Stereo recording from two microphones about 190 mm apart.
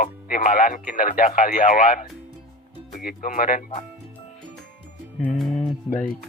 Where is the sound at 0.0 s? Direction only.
45° left (ahead or behind).